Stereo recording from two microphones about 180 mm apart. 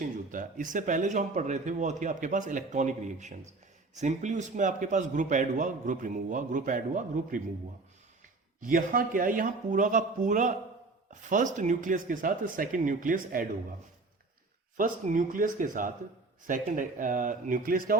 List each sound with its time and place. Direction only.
0.0 s a man's voice: 50° right (ahead or behind)
8.6 s a man's voice: 50° right (ahead or behind)
14.8 s a man's voice: 45° right (ahead or behind)